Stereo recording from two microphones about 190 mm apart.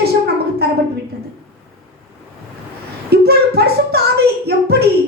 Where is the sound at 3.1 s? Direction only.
55° right (ahead or behind).